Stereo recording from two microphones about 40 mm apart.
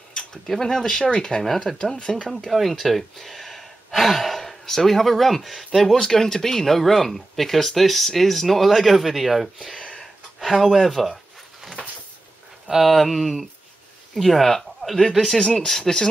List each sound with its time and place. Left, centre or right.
0.1 s tick-tock: centre
0.5 s speech: centre
2.3 s speech: centre
9.8 s a sound: left
10.4 s speech: centre
12.8 s speech: centre